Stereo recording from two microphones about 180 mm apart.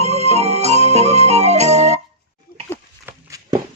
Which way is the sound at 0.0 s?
35° right (ahead or behind).